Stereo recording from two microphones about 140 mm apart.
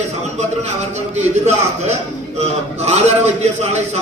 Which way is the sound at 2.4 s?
50° right (ahead or behind).